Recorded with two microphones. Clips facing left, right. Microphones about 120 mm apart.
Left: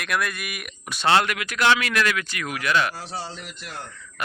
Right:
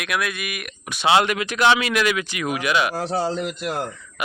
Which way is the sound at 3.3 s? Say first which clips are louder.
Right 13 dB; 75° right (ahead or behind).